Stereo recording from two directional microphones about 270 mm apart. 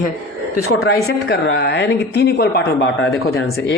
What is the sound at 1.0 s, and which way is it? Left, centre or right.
Speech, left.